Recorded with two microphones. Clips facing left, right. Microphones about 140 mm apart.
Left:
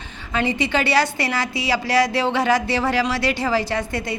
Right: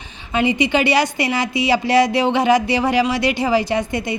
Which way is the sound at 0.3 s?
20° right (ahead or behind).